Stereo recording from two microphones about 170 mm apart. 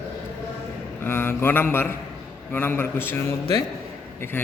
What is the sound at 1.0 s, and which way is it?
A man's voice, 15° left (ahead or behind).